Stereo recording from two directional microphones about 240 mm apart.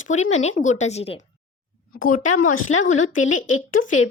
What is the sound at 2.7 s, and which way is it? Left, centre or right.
Speech, left.